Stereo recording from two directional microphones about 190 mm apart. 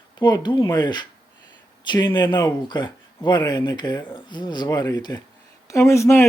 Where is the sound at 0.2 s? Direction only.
20° left (ahead or behind).